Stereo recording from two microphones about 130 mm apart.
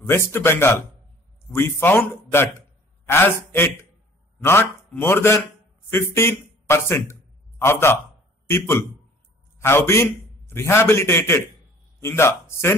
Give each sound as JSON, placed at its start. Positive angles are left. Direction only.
{"t": 0.0, "sound": "a man's voice", "side_deg": 20}